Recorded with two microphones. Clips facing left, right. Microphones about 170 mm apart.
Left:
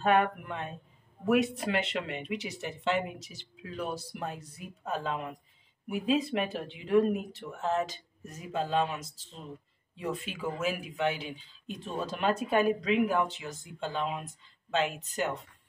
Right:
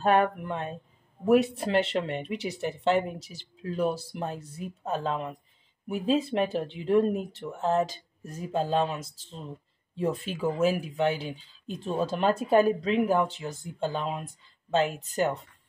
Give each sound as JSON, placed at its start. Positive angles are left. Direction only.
{"t": 0.0, "sound": "speech", "side_deg": -35}